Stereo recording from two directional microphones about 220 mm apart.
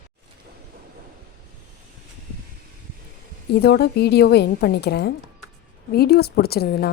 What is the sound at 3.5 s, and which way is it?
A woman's voice, 45° left (ahead or behind).